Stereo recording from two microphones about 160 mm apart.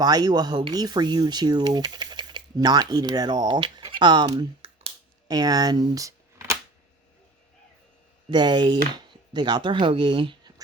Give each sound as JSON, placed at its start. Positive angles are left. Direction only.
{"t": 0.0, "sound": "speech", "side_deg": -25}
{"t": 5.3, "sound": "speech", "side_deg": -25}
{"t": 8.3, "sound": "speech", "side_deg": -30}